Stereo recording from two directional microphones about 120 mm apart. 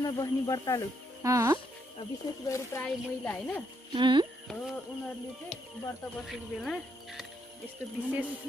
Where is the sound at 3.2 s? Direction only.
15° left (ahead or behind).